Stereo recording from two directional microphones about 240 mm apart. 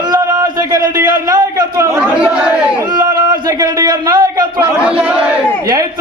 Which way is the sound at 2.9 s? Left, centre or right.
Right.